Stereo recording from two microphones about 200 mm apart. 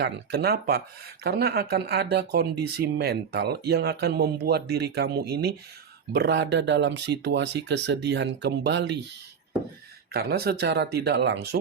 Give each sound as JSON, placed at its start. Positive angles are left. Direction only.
{"t": 0.0, "sound": "speech", "side_deg": -55}
{"t": 10.1, "sound": "speech", "side_deg": -50}